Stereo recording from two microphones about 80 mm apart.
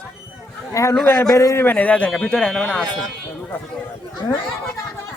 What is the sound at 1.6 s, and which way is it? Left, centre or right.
Speech, centre.